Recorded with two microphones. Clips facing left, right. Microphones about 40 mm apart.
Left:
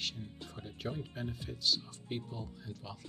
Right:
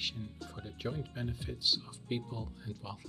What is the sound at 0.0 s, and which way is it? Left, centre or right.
Speech, centre.